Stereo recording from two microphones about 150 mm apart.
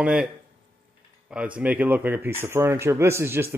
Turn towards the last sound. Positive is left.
turn(degrees=-15)  # may be behind; listen again after turning